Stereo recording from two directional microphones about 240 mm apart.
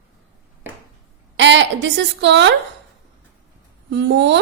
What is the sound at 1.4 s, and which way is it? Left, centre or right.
A woman's voice, right.